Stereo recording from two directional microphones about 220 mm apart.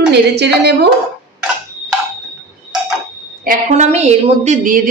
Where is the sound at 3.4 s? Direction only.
35° right (ahead or behind).